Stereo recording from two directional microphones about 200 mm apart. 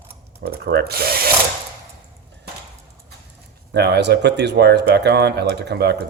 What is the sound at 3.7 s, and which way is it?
Speech, 60° right (ahead or behind).